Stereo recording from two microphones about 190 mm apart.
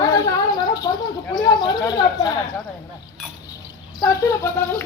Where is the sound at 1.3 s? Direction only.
25° left (ahead or behind).